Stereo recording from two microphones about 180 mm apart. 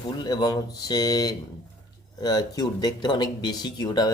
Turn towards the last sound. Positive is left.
turn(degrees=20)  # may be behind; listen again after turning